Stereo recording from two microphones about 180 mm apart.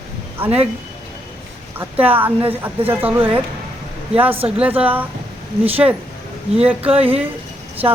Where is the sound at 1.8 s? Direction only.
10° right (ahead or behind).